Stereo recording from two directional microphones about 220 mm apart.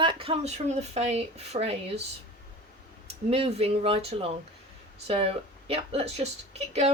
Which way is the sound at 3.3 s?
25° right (ahead or behind).